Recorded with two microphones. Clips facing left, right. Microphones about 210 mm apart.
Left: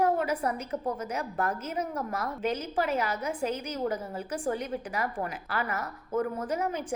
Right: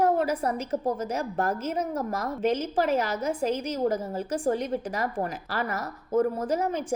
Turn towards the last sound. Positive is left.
turn(degrees=-30)  # may be behind; listen again after turning